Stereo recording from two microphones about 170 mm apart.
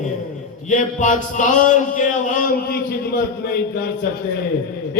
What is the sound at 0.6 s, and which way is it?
A man's voice, 45° left (ahead or behind).